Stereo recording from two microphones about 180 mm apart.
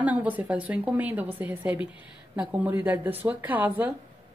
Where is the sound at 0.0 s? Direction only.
10° right (ahead or behind).